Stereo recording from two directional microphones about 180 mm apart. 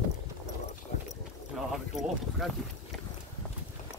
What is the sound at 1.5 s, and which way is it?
Clip-clop, centre (ahead or behind).